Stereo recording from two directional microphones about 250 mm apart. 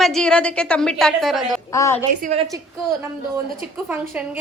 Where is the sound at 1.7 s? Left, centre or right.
Centre.